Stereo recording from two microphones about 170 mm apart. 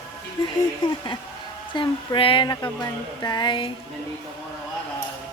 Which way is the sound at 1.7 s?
30° left (ahead or behind).